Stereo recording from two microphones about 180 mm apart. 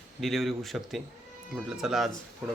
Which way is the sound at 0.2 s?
Centre (ahead or behind).